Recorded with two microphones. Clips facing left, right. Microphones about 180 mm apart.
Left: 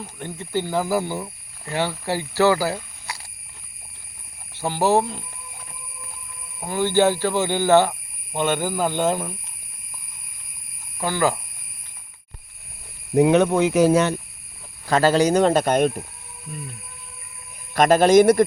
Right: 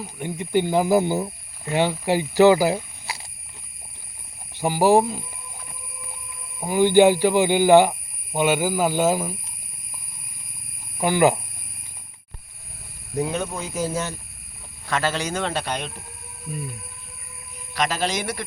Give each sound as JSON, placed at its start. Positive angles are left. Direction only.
{"t": 0.0, "sound": "speech", "side_deg": -10}
{"t": 4.5, "sound": "speech", "side_deg": -10}
{"t": 6.6, "sound": "speech", "side_deg": -15}
{"t": 10.9, "sound": "speech", "side_deg": -15}
{"t": 13.1, "sound": "cricket", "side_deg": 70}
{"t": 14.8, "sound": "speech", "side_deg": 40}
{"t": 17.7, "sound": "speech", "side_deg": 50}